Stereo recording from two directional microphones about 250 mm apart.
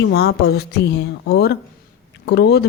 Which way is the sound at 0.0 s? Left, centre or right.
Left.